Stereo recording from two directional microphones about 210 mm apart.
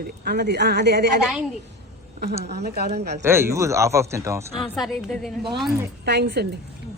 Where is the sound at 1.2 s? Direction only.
Centre (ahead or behind).